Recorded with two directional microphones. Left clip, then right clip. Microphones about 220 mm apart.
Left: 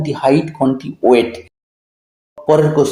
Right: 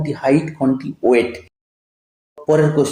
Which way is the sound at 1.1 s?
20° left (ahead or behind).